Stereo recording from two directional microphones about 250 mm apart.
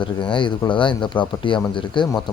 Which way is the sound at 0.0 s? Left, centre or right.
Centre.